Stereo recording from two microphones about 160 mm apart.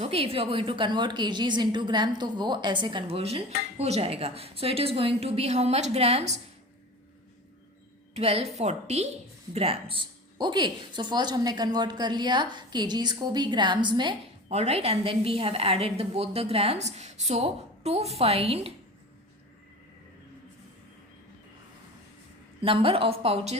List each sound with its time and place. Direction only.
0.0 s a woman's voice: 35° right (ahead or behind)
8.1 s a woman's voice: 40° right (ahead or behind)
14.5 s a woman's voice: 40° right (ahead or behind)
22.6 s a woman's voice: 35° right (ahead or behind)